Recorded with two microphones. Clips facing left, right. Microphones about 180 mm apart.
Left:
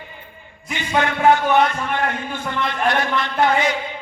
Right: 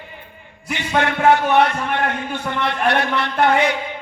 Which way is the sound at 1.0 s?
65° right (ahead or behind).